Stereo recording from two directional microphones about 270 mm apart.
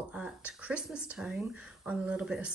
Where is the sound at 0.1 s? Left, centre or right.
Centre.